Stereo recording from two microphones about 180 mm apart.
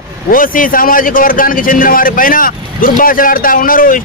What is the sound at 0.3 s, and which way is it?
Speech, 50° left (ahead or behind).